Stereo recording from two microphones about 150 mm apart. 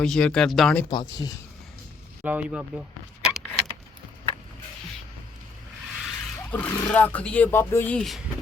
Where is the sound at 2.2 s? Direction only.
10° right (ahead or behind).